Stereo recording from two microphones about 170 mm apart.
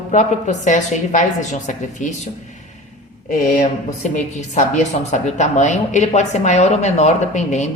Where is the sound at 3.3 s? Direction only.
45° left (ahead or behind).